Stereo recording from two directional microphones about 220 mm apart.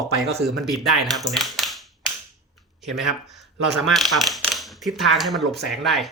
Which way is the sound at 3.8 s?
Centre (ahead or behind).